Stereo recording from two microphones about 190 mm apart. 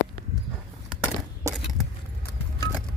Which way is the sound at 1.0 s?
5° right (ahead or behind).